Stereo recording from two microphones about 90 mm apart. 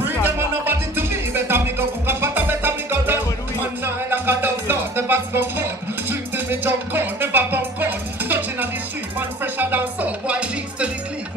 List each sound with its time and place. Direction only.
0.0 s music: 25° right (ahead or behind)